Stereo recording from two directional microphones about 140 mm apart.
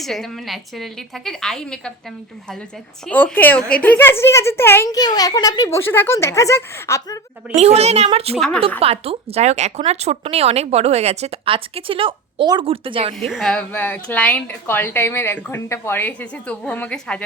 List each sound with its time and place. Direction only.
0.0 s a woman's voice: centre (ahead or behind)
3.1 s a woman's voice: 10° left (ahead or behind)
4.9 s speech: 25° left (ahead or behind)
7.5 s speech: 50° right (ahead or behind)
8.4 s a woman's voice: 5° left (ahead or behind)
8.8 s speech: 45° right (ahead or behind)
13.1 s a woman's voice: centre (ahead or behind)